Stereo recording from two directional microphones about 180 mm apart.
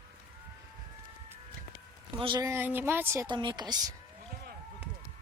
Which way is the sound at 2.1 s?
25° right (ahead or behind).